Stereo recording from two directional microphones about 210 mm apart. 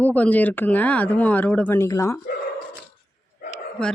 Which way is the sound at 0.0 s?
5° left (ahead or behind).